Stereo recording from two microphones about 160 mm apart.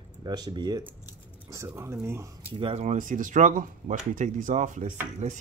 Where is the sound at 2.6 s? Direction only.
40° right (ahead or behind).